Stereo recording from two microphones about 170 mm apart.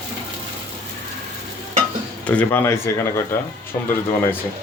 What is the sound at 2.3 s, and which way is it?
Speech, 10° left (ahead or behind).